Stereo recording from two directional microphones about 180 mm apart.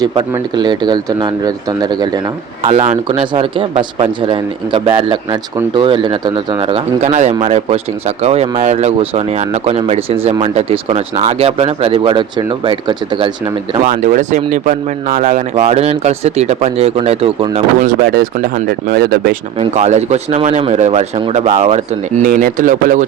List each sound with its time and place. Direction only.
0.0 s speech: 25° right (ahead or behind)
2.6 s speech: 35° right (ahead or behind)
13.8 s speech: 45° right (ahead or behind)
17.8 s speech: 55° right (ahead or behind)
19.5 s speech: 40° right (ahead or behind)
22.3 s speech: 50° right (ahead or behind)